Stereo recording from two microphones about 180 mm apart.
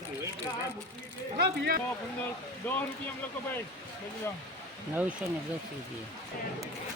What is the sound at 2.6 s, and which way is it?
Speech, 10° left (ahead or behind).